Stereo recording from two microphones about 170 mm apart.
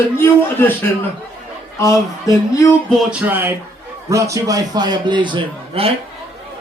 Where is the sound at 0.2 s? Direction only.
10° left (ahead or behind).